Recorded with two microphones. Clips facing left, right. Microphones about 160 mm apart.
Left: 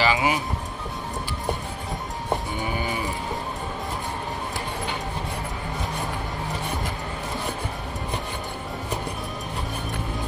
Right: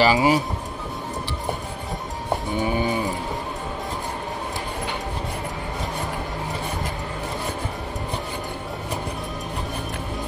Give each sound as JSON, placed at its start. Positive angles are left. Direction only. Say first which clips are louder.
{"t": 0.0, "sound": "speech", "louder": "right 5 dB", "side_deg": -35}